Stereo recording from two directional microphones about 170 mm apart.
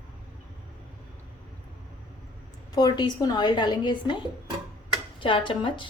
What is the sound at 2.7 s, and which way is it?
A woman's voice, 25° left (ahead or behind).